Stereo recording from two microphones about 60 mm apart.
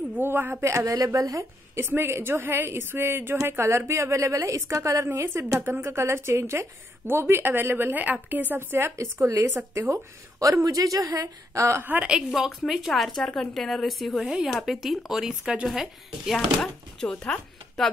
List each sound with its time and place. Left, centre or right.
0.2 s a woman's voice: right
1.8 s a woman's voice: right
5.9 s a woman's voice: right
8.9 s a woman's voice: right
12.1 s a woman's voice: centre
13.2 s speech: centre
13.5 s a woman's voice: centre
16.3 s speech: centre